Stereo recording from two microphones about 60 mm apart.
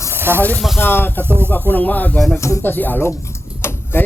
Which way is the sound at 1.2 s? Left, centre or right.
Right.